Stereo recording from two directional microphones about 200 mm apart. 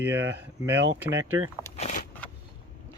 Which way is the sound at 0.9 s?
80° right.